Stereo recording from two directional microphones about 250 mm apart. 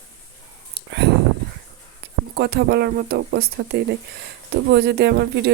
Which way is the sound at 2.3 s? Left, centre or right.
Right.